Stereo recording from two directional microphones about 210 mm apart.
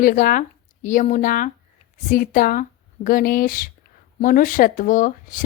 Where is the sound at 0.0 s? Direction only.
40° left (ahead or behind).